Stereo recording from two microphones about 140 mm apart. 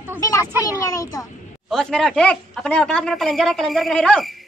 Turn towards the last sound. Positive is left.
turn(degrees=5)  # may be behind; listen again after turning